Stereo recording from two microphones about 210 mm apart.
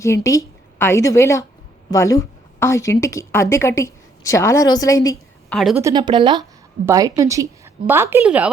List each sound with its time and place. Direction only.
0.0 s a woman's voice: 15° left (ahead or behind)
5.5 s a woman's voice: centre (ahead or behind)
5.8 s a woman's voice: 20° right (ahead or behind)